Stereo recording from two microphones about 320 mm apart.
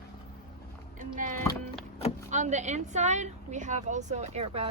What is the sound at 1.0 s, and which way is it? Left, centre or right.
A woman's voice, right.